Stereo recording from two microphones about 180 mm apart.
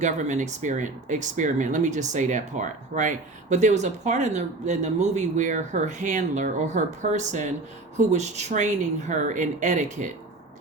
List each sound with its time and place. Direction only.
0.0 s speech: 45° right (ahead or behind)